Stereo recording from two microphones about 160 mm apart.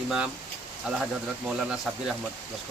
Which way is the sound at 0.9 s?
5° right (ahead or behind).